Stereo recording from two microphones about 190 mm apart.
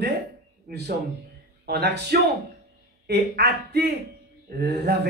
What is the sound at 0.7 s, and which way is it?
A man's voice, 55° right (ahead or behind).